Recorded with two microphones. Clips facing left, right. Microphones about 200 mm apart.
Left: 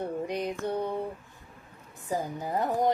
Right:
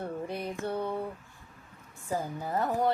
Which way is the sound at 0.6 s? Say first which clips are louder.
Left 2 dB; 15° left (ahead or behind).